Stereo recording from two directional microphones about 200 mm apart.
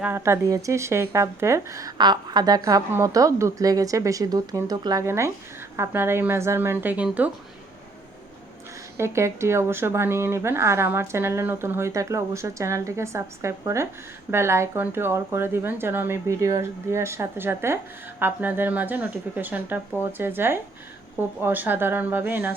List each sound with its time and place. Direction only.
0.0 s speech: 10° right (ahead or behind)
9.0 s speech: 15° right (ahead or behind)